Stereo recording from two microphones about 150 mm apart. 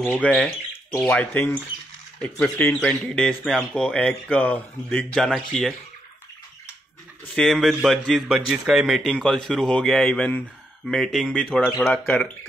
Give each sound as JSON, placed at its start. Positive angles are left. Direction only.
{"t": 0.0, "sound": "a man's voice", "side_deg": 10}
{"t": 7.3, "sound": "a man's voice", "side_deg": 0}